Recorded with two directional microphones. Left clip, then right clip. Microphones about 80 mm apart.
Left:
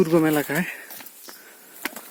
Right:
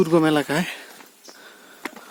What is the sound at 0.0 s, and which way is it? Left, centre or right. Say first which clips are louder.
Speech: right 1 dB; right.